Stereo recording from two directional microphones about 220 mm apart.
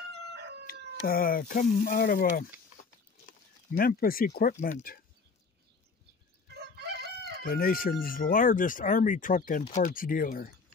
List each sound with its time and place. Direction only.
0.3 s crowing: 50° right (ahead or behind)
0.7 s speech: 40° left (ahead or behind)
6.5 s chicken: 50° right (ahead or behind)
7.4 s speech: 40° left (ahead or behind)